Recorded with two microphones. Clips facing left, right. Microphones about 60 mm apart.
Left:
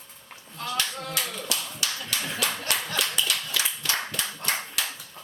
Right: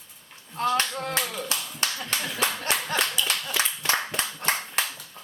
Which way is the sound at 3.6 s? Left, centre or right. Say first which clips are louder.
Right 3 dB; right.